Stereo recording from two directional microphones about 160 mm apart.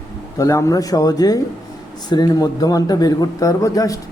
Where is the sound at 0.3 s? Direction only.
20° left (ahead or behind).